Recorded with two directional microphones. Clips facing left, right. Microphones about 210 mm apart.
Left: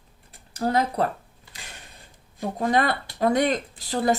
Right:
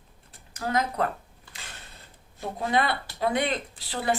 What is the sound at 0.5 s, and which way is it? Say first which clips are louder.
Speech: left 4 dB; 35° left (ahead or behind).